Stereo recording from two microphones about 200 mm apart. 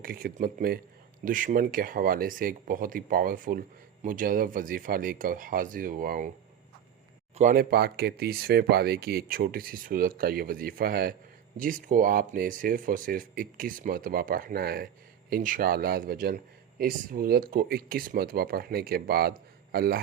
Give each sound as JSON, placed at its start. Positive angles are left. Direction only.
{"t": 0.0, "sound": "speech", "side_deg": -45}
{"t": 7.3, "sound": "speech", "side_deg": -45}